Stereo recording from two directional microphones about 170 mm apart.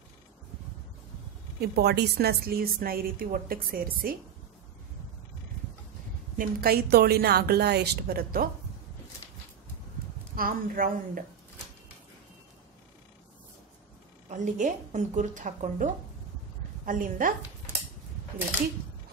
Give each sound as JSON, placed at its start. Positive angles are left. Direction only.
{"t": 1.6, "sound": "a woman's voice", "side_deg": -70}
{"t": 6.3, "sound": "a woman's voice", "side_deg": -65}
{"t": 10.3, "sound": "a woman's voice", "side_deg": -55}
{"t": 14.3, "sound": "speech", "side_deg": -45}